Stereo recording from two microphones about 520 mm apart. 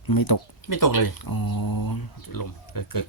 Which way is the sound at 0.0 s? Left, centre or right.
Left.